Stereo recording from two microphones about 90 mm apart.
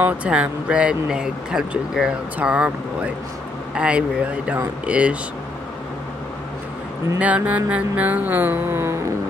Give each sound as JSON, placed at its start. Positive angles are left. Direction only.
{"t": 0.0, "sound": "speech", "side_deg": -15}
{"t": 7.2, "sound": "music", "side_deg": -15}